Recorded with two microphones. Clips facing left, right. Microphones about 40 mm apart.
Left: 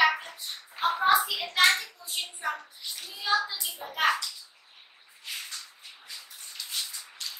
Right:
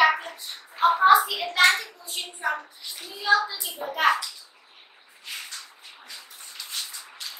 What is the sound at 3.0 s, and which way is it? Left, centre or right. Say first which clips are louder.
Child singing: right 6 dB; centre.